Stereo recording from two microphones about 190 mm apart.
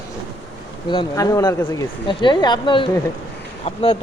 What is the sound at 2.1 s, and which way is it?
Speech, 25° left (ahead or behind).